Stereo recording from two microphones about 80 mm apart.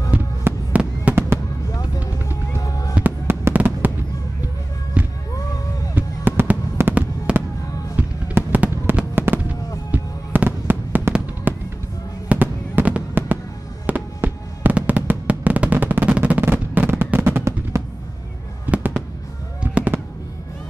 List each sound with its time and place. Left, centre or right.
0.4 s fireworks: right
1.7 s music: left
2.9 s fireworks: right
5.0 s music: centre
5.9 s fireworks: right
14.9 s drum: centre
16.1 s fireworks: centre; by 17.8 s right
18.7 s fireworks: centre